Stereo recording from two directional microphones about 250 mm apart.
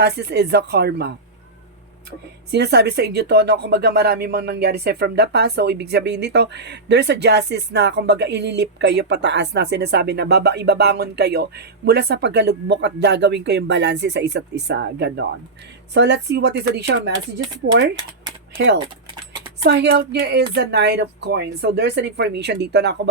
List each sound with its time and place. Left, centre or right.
0.0 s a woman's voice: right
2.5 s a woman's voice: right
18.5 s speech: right